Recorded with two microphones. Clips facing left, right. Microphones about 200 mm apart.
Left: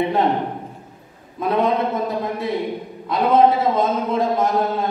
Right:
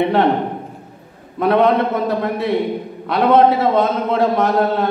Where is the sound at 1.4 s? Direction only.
70° right (ahead or behind).